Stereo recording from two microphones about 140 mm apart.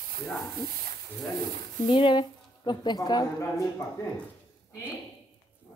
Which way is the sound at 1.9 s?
35° left (ahead or behind).